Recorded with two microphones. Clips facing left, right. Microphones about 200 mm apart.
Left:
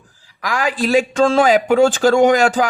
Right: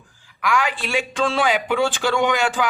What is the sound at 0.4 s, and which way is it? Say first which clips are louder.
A man's voice: left 4 dB; 35° left (ahead or behind).